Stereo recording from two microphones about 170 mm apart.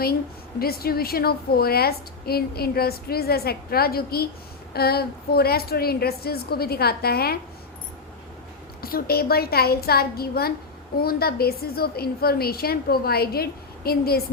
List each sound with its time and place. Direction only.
0.6 s a woman's voice: 65° left (ahead or behind)
8.8 s a woman's voice: 60° left (ahead or behind)